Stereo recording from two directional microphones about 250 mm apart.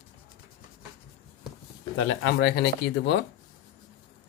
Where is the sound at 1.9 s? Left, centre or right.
Left.